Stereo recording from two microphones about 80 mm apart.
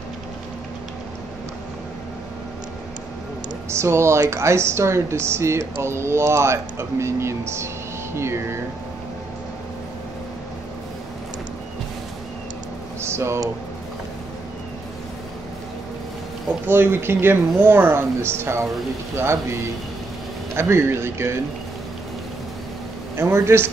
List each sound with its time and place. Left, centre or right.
3.7 s speech: right
13.0 s a sound: right
16.6 s speech: right
20.5 s speech: right
23.1 s speech: right